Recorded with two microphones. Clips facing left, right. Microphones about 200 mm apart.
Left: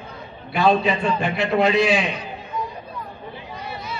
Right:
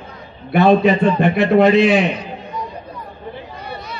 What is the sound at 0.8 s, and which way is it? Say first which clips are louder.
A man's voice: right 7 dB; 60° right (ahead or behind).